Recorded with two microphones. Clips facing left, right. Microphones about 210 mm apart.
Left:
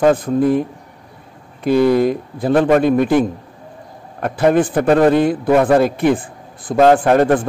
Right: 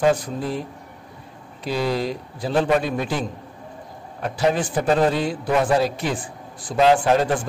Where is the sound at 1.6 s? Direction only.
55° left (ahead or behind).